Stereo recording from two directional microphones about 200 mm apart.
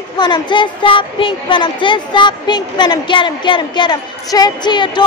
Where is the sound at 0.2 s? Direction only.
25° left (ahead or behind).